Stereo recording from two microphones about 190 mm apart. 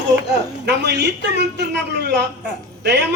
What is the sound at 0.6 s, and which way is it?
A man's voice, 60° right (ahead or behind).